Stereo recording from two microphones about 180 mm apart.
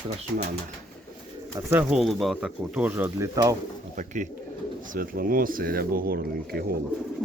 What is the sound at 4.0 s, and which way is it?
Speech, 45° right (ahead or behind).